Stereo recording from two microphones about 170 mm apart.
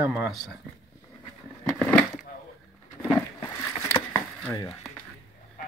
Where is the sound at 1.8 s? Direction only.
5° left (ahead or behind).